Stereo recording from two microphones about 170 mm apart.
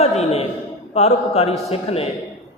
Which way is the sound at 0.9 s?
40° left (ahead or behind).